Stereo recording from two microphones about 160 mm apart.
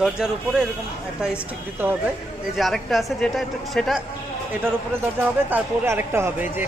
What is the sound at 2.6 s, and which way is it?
Speech, centre (ahead or behind).